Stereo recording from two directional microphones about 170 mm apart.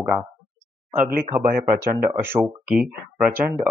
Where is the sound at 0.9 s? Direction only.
50° right (ahead or behind).